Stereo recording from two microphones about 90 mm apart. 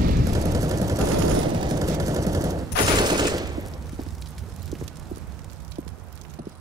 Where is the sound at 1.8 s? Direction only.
40° right (ahead or behind).